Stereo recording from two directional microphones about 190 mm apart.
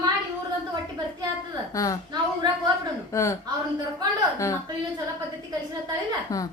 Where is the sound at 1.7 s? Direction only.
20° left (ahead or behind).